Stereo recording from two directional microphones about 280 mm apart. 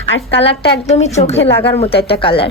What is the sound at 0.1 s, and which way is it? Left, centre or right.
Speech, left.